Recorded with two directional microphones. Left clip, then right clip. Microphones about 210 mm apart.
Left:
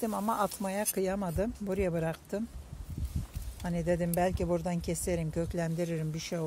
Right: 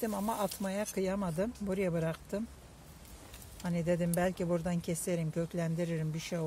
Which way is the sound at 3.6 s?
15° left (ahead or behind).